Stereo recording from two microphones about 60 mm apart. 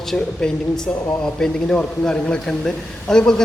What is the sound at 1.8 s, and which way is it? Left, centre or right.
Speech, centre.